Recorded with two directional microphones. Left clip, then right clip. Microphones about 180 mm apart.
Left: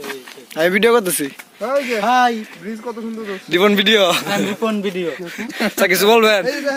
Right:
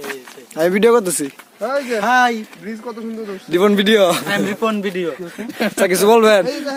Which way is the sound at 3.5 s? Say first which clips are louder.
Even; 10° right (ahead or behind).